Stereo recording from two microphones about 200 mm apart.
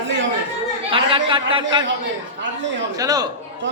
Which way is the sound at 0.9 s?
25° right (ahead or behind).